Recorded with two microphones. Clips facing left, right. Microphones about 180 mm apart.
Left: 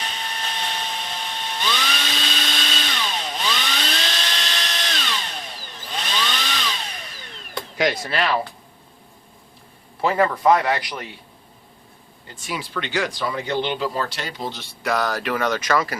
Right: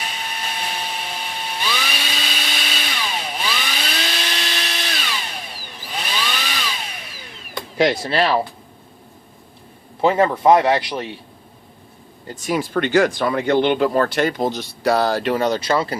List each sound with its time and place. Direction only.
0.6 s a sound: 10° right (ahead or behind)
7.8 s a man's voice: 30° right (ahead or behind)
10.0 s a man's voice: 25° right (ahead or behind)
12.3 s speech: 40° right (ahead or behind)